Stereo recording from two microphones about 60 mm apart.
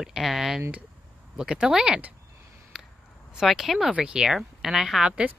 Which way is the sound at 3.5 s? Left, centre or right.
Centre.